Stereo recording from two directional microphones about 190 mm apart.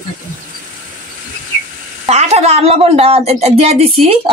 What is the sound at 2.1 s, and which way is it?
A woman's voice, 35° right (ahead or behind).